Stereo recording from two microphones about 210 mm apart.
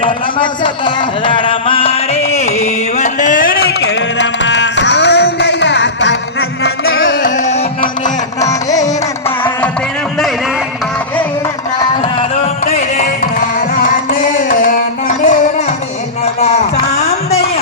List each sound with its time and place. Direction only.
0.0 s a sound: 20° left (ahead or behind); by 3.6 s 40° left (ahead or behind)
3.6 s music: 65° left (ahead or behind)
7.2 s music: 35° left (ahead or behind)
8.4 s music: 15° left (ahead or behind)
13.8 s music: 40° left (ahead or behind)